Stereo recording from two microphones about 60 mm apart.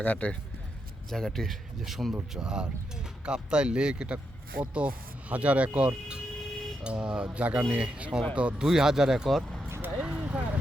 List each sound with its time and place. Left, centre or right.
0.0 s speech: left
1.1 s speech: centre
2.3 s speech: centre
8.6 s speech: centre
9.6 s vehicle: right
10.0 s vehicle: right